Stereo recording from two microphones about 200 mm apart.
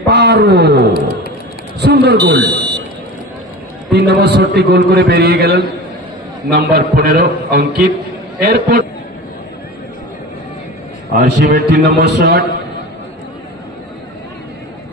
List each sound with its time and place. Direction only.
0.0 s a man's voice: 55° right (ahead or behind)
2.4 s buzzer: 20° right (ahead or behind)
3.9 s a man's voice: 55° right (ahead or behind)
11.1 s a man's voice: 55° right (ahead or behind)